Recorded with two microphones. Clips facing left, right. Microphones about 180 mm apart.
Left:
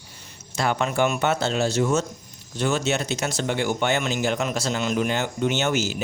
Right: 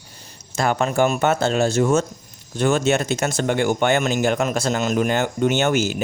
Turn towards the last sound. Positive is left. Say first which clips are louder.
# right 4 dB
turn(degrees=-55)  # may be behind; listen again after turning